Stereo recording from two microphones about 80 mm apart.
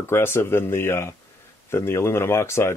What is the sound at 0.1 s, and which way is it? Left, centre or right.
Speech, left.